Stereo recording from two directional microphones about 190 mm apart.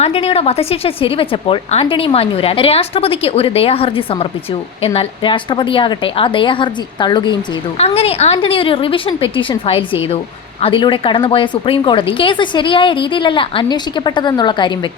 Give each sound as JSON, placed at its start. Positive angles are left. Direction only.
{"t": 0.0, "sound": "a woman's voice", "side_deg": 30}